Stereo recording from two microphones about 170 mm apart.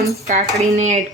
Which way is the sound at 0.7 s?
45° right (ahead or behind).